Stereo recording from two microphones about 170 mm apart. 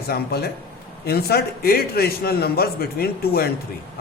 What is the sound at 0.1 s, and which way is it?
A man's voice, 65° left (ahead or behind).